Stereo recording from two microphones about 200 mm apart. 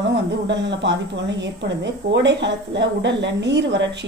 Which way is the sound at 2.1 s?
60° right (ahead or behind).